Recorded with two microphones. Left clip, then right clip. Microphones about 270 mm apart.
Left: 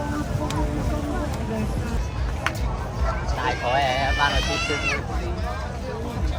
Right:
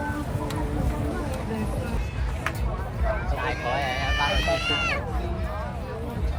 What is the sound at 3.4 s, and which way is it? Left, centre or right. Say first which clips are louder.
Run: left 7 dB; left.